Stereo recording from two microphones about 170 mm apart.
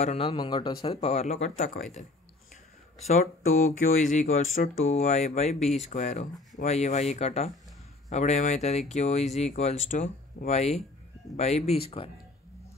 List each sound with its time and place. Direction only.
0.0 s speech: 35° left (ahead or behind)
3.1 s speech: 45° left (ahead or behind)